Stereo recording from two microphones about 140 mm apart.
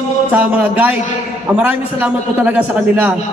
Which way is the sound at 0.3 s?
10° right (ahead or behind).